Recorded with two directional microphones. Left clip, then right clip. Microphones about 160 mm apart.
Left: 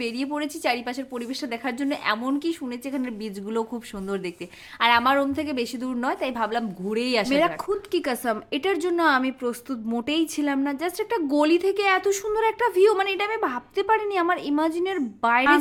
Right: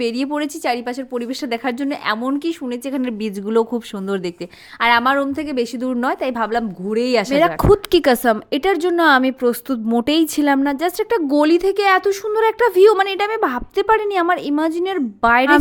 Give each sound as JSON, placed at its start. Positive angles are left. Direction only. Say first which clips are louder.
{"t": 0.0, "sound": "a woman's voice", "louder": "right 7 dB", "side_deg": -35}
{"t": 7.7, "sound": "a woman's voice", "louder": "right 12 dB", "side_deg": -50}